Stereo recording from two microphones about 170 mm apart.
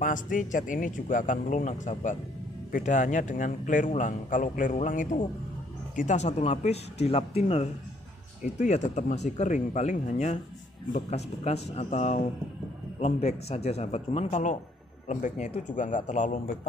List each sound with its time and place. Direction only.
0.0 s a man's voice: 50° left (ahead or behind)